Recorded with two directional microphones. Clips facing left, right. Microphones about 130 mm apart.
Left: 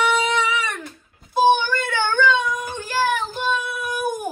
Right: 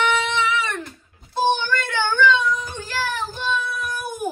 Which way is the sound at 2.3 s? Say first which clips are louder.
Right 1 dB; 55° left (ahead or behind).